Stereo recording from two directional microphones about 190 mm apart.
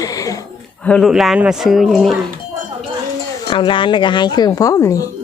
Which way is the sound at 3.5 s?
25° left (ahead or behind).